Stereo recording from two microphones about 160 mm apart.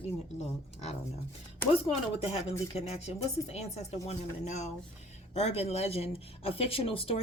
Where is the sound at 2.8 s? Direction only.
40° left (ahead or behind).